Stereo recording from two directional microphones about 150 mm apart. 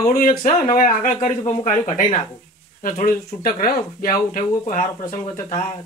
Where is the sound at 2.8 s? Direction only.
70° left (ahead or behind).